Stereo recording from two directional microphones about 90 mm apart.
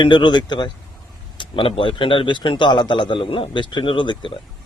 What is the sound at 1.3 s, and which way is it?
A man's voice, 75° left (ahead or behind).